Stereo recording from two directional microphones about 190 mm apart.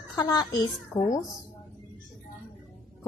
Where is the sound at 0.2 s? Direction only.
20° left (ahead or behind).